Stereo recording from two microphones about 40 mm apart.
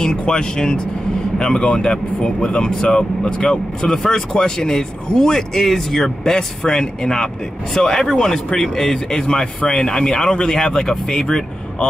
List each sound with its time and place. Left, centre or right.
0.0 s speech: left